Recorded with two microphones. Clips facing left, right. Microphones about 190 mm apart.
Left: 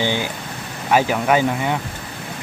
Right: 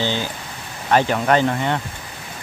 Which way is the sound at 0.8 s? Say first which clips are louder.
Even; 5° left (ahead or behind).